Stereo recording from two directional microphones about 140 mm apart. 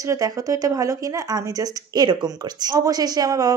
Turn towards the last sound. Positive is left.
turn(degrees=-25)  # may be behind; listen again after turning